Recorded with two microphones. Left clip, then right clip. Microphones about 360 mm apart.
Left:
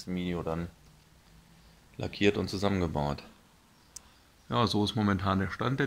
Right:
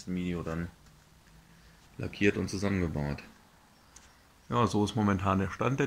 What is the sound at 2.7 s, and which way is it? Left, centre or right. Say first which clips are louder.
Speech: left 5 dB; left.